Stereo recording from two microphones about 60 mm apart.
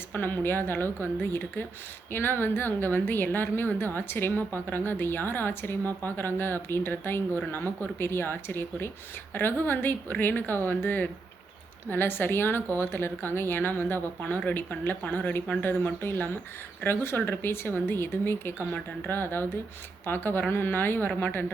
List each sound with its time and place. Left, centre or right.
0.1 s speech: left